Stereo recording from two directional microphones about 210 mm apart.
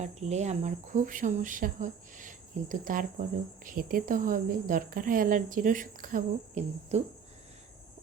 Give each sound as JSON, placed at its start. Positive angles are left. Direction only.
{"t": 0.0, "sound": "speech", "side_deg": -35}